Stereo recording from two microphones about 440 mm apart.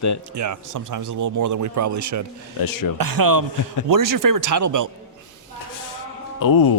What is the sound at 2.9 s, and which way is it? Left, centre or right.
A man's voice, right.